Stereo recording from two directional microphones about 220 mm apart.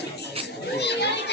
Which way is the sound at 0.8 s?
50° left (ahead or behind).